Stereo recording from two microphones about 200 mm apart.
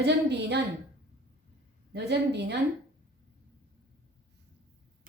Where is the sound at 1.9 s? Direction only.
55° right (ahead or behind).